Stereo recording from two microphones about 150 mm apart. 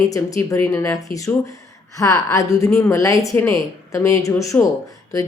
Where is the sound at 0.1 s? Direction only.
20° left (ahead or behind).